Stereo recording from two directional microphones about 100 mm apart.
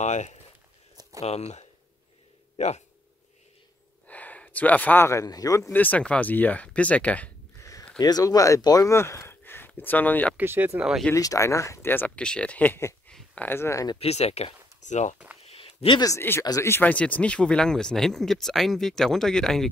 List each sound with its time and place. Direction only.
1.2 s speech: 90° left
4.1 s a sound: 15° left (ahead or behind)
5.0 s speech: 35° left (ahead or behind)
5.7 s speech: 15° left (ahead or behind)
8.0 s speech: 40° left (ahead or behind); by 10.3 s 15° left (ahead or behind)
10.3 s speech: 20° right (ahead or behind)
10.8 s speech: 5° right (ahead or behind)
11.1 s speech: 35° left (ahead or behind)
12.2 s speech: 10° left (ahead or behind)
13.1 s a sound: 10° left (ahead or behind)
13.5 s speech: 25° left (ahead or behind)
13.9 s speech: 90° left
15.4 s a sound: 75° left (ahead or behind)
16.2 s speech: 20° left (ahead or behind); by 19.7 s 5° left (ahead or behind)